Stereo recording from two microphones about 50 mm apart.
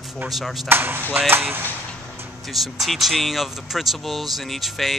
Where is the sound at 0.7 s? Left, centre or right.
Right.